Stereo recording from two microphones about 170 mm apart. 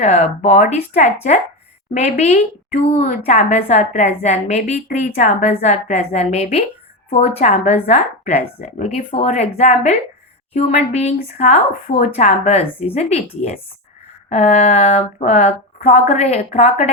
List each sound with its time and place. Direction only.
0.0 s a woman's voice: 40° left (ahead or behind)
14.3 s a woman's voice: 40° left (ahead or behind)